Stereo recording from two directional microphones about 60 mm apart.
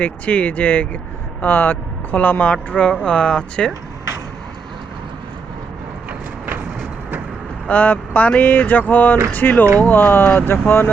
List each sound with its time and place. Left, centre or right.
0.0 s speech: left
6.1 s vehicle: right
7.7 s speech: left